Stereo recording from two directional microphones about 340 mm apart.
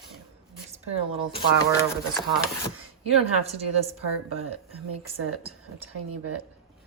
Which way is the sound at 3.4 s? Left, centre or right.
Centre.